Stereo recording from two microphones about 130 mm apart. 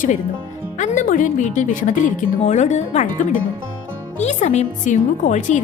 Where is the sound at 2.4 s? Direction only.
65° left (ahead or behind); by 3.4 s 80° left.